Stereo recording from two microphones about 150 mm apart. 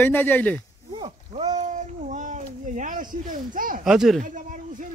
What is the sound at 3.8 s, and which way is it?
Speech, centre (ahead or behind).